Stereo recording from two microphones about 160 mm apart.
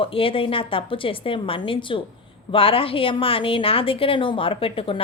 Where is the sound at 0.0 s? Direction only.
35° left (ahead or behind).